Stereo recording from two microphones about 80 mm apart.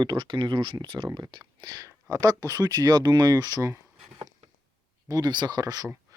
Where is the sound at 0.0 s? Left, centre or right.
Right.